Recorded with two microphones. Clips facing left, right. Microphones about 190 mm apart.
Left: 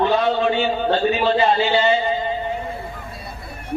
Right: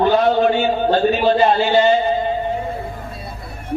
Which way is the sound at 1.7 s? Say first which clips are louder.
Right 4 dB; 45° right (ahead or behind).